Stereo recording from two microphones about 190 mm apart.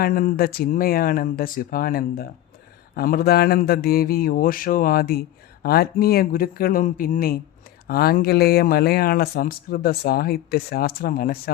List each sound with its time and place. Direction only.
0.0 s speech: 50° left (ahead or behind)